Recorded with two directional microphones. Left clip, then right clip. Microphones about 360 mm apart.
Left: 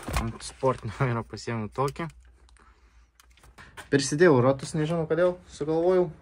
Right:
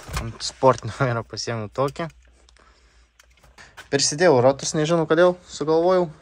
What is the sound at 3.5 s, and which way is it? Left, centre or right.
Speech, centre.